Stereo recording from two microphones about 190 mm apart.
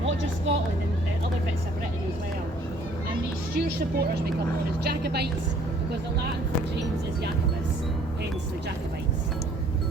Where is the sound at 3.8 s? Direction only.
55° right (ahead or behind).